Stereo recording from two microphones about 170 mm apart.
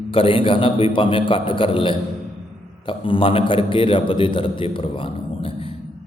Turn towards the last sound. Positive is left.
turn(degrees=35)  # may be behind; listen again after turning